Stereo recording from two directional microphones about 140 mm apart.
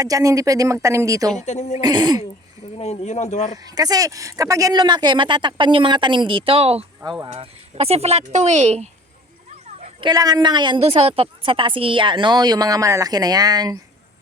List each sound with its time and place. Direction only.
0.0 s speech: 25° right (ahead or behind)
1.4 s speech: 55° left (ahead or behind)
1.8 s speech: 30° right (ahead or behind)
2.7 s speech: 50° left (ahead or behind)
3.6 s speech: 30° right (ahead or behind); by 6.8 s 45° right (ahead or behind)
7.0 s speech: 30° right (ahead or behind)
7.3 s speech: 45° right (ahead or behind)
10.0 s speech: 30° right (ahead or behind)
10.8 s speech: 45° right (ahead or behind); by 13.7 s 25° right (ahead or behind)